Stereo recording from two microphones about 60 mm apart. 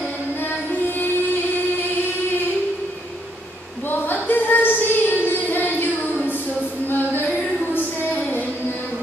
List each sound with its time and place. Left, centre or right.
0.4 s music: left
4.0 s child singing: left
6.9 s a sound: left